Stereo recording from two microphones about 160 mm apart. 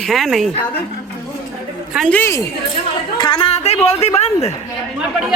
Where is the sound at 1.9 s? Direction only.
Centre (ahead or behind).